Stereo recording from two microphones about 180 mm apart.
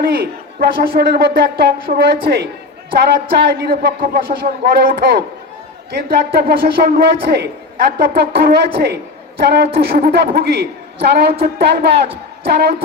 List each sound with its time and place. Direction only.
0.0 s a man's voice: 55° right (ahead or behind)